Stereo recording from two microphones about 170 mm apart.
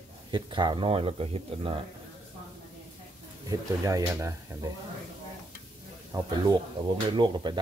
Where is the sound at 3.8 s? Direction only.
20° right (ahead or behind).